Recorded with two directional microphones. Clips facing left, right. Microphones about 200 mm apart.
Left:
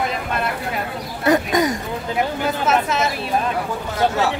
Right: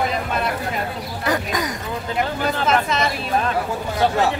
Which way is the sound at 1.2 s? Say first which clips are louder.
Left 6 dB; 25° left (ahead or behind).